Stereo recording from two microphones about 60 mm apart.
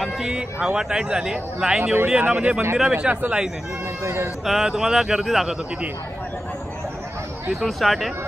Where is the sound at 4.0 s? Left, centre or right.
Right.